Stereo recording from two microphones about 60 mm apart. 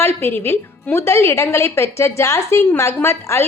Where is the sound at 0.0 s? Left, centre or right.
Left.